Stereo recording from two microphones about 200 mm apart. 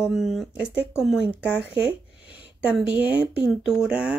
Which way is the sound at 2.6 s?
5° right (ahead or behind).